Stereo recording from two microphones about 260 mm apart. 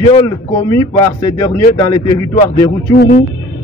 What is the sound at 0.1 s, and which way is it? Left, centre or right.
Speech, centre.